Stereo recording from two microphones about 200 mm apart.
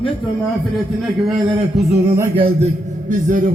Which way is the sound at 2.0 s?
10° right (ahead or behind).